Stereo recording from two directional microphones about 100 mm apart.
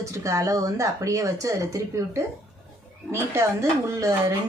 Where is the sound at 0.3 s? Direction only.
30° right (ahead or behind).